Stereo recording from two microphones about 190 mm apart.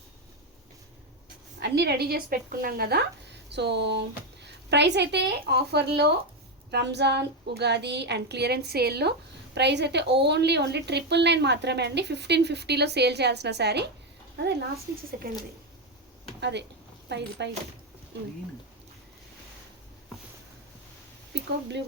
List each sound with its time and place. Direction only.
1.5 s a woman's voice: 60° right (ahead or behind)
16.4 s a woman's voice: 65° right (ahead or behind)